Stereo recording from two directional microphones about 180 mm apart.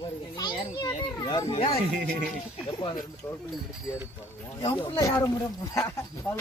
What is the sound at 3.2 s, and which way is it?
Speech, 20° left (ahead or behind).